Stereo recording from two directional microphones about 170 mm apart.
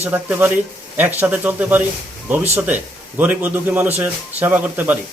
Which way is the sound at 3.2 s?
10° right (ahead or behind).